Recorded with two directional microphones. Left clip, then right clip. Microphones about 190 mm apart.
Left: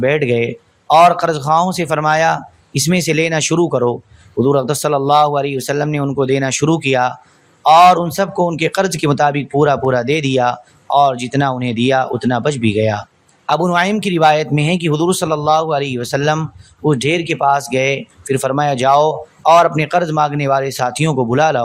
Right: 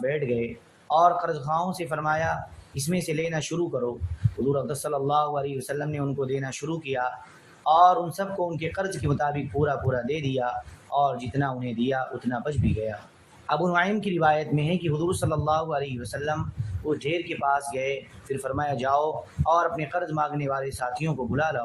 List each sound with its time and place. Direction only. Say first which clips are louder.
0.0 s a man's voice: left 12 dB; 45° left (ahead or behind)